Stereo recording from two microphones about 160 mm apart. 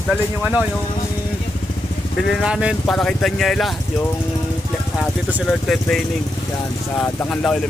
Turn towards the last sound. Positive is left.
turn(degrees=5)  # may be behind; listen again after turning